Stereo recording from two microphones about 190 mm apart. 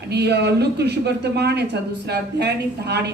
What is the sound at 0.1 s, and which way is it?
Speech, 60° right (ahead or behind).